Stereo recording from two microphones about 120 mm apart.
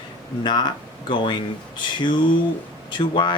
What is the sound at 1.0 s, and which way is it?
Speech, 40° left (ahead or behind).